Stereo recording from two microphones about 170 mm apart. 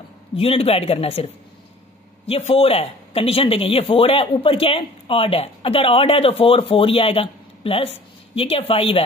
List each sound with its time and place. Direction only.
0.4 s speech: 35° left (ahead or behind)
2.2 s speech: 35° left (ahead or behind)